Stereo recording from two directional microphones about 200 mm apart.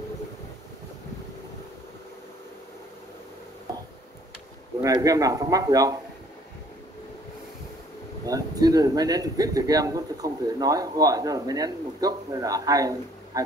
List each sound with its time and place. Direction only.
4.8 s speech: 15° right (ahead or behind)
8.3 s speech: 20° right (ahead or behind)